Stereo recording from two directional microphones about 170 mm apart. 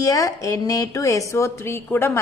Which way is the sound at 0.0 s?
20° left (ahead or behind).